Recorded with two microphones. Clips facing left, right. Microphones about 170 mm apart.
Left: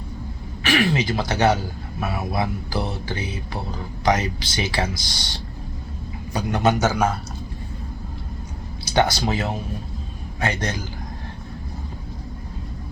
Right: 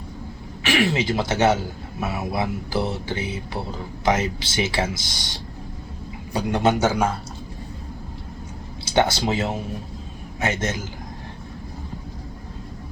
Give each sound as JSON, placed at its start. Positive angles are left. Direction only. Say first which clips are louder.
{"t": 0.6, "sound": "speech", "louder": "even", "side_deg": -25}
{"t": 8.9, "sound": "speech", "louder": "even", "side_deg": -25}